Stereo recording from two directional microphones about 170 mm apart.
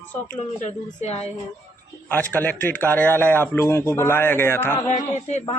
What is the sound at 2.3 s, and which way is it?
A man's voice, 10° left (ahead or behind).